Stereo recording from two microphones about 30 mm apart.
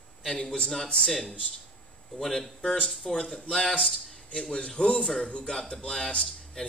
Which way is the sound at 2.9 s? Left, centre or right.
Centre.